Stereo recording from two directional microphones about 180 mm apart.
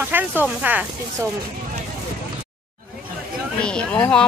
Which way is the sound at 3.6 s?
5° left (ahead or behind).